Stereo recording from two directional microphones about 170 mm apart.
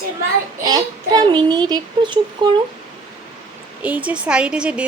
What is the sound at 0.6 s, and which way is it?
Child singing, 25° right (ahead or behind).